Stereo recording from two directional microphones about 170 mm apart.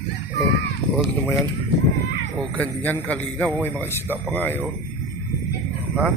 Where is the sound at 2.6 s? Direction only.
10° left (ahead or behind).